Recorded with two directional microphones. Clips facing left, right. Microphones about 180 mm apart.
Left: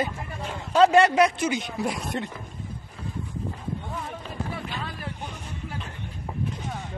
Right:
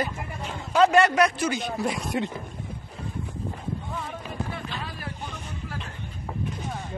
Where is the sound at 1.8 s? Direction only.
Centre (ahead or behind).